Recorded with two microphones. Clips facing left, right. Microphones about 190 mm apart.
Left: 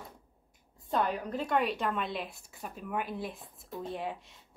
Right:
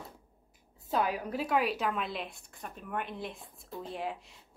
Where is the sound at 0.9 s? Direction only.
5° right (ahead or behind).